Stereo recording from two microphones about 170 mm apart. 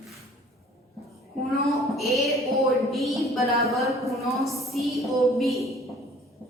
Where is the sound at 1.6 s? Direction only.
Centre (ahead or behind).